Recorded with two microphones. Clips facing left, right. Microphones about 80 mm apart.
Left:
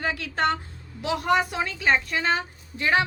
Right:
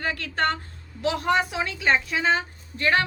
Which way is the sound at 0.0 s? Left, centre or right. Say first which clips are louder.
Even; centre.